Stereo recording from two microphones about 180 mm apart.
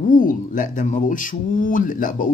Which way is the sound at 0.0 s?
50° left (ahead or behind).